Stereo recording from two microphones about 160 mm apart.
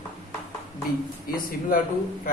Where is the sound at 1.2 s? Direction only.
65° left (ahead or behind).